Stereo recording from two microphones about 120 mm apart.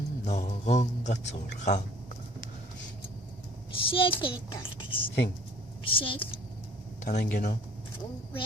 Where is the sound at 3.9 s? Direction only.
50° left (ahead or behind).